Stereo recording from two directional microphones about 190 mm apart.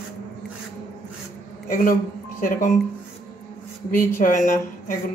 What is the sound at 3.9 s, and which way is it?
Speech, 45° left (ahead or behind).